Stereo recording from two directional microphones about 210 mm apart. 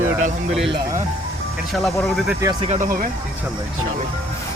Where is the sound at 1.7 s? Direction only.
Centre (ahead or behind).